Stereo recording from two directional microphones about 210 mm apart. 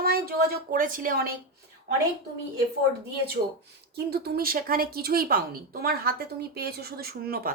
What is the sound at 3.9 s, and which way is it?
A woman's voice, 50° right (ahead or behind).